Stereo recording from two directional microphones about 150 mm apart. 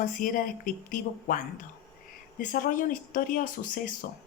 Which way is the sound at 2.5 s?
65° left (ahead or behind).